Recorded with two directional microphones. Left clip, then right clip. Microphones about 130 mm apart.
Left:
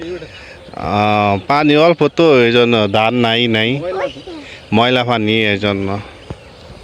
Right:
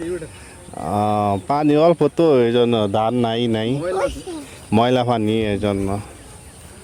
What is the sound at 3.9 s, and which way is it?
Speech, 15° right (ahead or behind).